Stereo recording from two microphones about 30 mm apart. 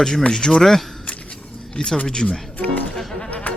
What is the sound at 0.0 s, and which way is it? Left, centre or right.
Speech, centre.